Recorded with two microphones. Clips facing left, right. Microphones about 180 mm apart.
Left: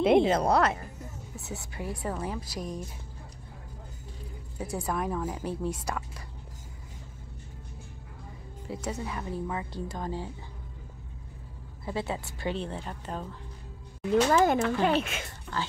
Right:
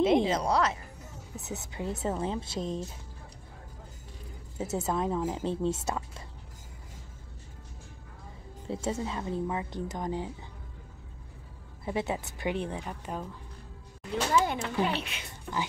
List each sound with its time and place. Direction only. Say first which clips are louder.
0.0 s a woman's voice: left 3 dB; 60° left (ahead or behind)
1.3 s speech: right 3 dB; 20° right (ahead or behind)
4.6 s speech: right 2 dB; 25° right (ahead or behind)
8.6 s speech: right 2 dB; 25° right (ahead or behind)
11.8 s a woman's voice: right 1 dB; 20° right (ahead or behind)
14.3 s a child's voice: left 4 dB; 45° left (ahead or behind)
15.5 s a woman's voice: right 1 dB; 10° right (ahead or behind)